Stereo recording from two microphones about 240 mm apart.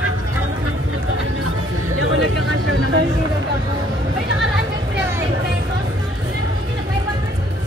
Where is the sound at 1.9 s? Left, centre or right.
Right.